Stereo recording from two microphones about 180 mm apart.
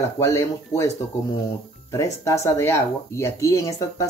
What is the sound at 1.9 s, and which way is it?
Speech, 15° left (ahead or behind).